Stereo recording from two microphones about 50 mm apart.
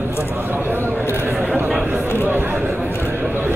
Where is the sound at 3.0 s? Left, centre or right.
Right.